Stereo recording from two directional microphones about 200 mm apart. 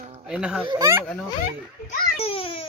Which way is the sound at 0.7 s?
15° right (ahead or behind).